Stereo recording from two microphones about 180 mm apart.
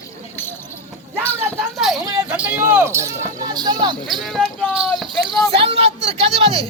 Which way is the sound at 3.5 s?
25° right (ahead or behind).